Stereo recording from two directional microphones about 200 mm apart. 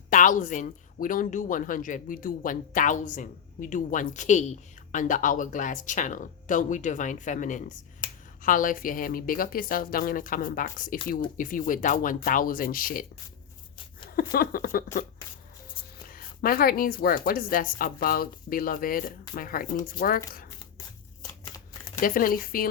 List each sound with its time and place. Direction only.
0.1 s a woman's voice: 40° left (ahead or behind)
14.2 s a woman's voice: 45° left (ahead or behind)
16.0 s a woman's voice: 45° left (ahead or behind)
22.0 s a woman's voice: 45° left (ahead or behind)